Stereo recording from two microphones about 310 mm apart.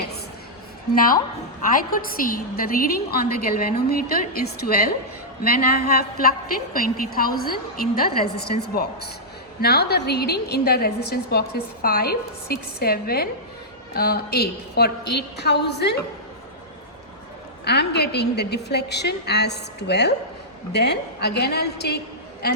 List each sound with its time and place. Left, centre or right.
0.9 s a woman's voice: left
17.7 s a woman's voice: left